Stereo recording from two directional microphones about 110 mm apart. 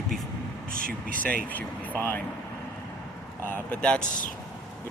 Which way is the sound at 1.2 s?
15° left (ahead or behind).